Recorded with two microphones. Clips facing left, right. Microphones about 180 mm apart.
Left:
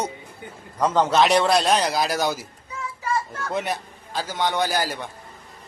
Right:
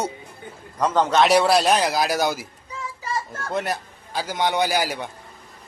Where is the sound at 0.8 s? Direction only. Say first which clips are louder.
Even; 10° left (ahead or behind); by 2.5 s 10° right (ahead or behind).